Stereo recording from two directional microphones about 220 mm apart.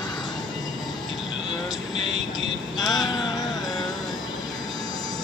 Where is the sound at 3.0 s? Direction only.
Centre (ahead or behind).